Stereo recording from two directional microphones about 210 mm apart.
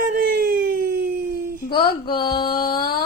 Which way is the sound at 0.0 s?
45° right (ahead or behind).